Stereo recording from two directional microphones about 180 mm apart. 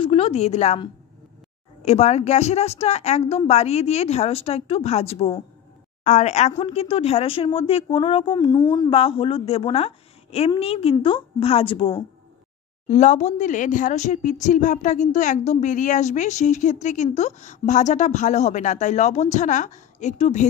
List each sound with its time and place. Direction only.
0.0 s speech: 35° left (ahead or behind)
1.9 s speech: 35° left (ahead or behind); by 8.8 s 15° left (ahead or behind)
8.8 s speech: 30° left (ahead or behind)
12.8 s speech: 40° left (ahead or behind)